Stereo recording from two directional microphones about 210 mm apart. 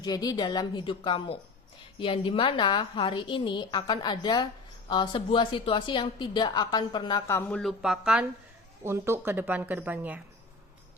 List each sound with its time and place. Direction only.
0.0 s a woman's voice: 20° left (ahead or behind); by 10.2 s 10° right (ahead or behind)